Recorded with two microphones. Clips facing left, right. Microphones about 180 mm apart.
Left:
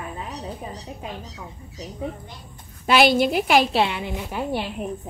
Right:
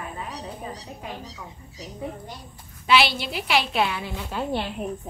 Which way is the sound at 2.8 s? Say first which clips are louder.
Left 5 dB; 45° left (ahead or behind).